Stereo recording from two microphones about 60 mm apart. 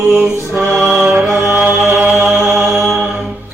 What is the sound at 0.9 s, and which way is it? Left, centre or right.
Music, right.